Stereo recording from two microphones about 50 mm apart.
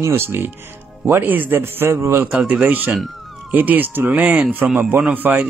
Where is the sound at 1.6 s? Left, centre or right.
Right.